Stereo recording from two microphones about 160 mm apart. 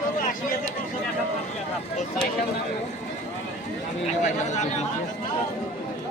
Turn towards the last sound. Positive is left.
turn(degrees=45)  # may be behind; listen again after turning